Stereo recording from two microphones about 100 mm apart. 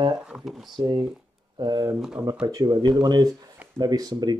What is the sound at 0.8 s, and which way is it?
Speech, 45° right (ahead or behind).